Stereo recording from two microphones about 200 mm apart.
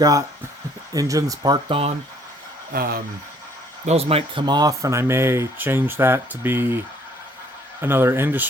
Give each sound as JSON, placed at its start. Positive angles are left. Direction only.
{"t": 0.0, "sound": "speech", "side_deg": -15}
{"t": 2.7, "sound": "speech", "side_deg": -50}
{"t": 3.8, "sound": "speech", "side_deg": -30}